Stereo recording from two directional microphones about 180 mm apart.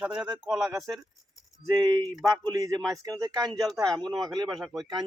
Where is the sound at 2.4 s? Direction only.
20° right (ahead or behind).